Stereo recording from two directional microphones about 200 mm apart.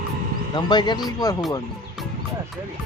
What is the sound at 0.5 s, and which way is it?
Speech, 20° left (ahead or behind).